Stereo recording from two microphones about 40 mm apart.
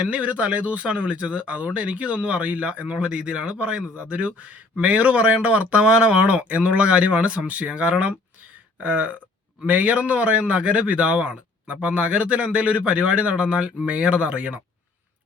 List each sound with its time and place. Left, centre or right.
0.0 s speech: right